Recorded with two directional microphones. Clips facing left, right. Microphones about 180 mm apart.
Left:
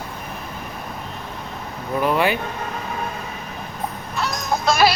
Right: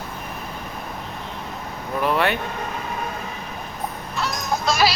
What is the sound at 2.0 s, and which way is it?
Vehicle, centre (ahead or behind).